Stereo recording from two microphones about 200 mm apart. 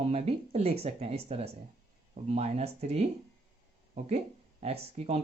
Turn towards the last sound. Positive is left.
turn(degrees=-30)  # may be behind; listen again after turning